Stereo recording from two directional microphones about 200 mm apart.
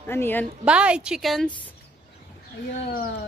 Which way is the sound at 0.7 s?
5° right (ahead or behind).